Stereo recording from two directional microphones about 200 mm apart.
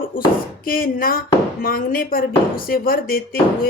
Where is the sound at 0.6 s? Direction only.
45° left (ahead or behind).